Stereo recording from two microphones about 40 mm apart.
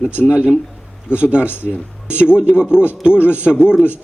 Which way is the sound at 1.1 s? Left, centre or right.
Right.